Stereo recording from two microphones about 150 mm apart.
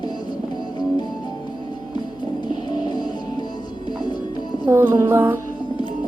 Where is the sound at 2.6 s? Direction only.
30° left (ahead or behind).